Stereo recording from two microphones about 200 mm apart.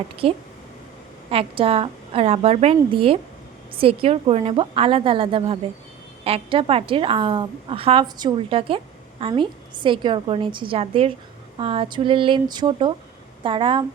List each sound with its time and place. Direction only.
0.2 s a woman's voice: 25° right (ahead or behind)